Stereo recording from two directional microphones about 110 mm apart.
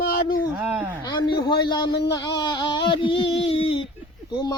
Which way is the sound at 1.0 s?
40° left (ahead or behind).